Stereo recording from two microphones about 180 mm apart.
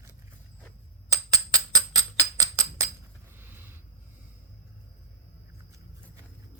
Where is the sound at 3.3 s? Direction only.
10° right (ahead or behind).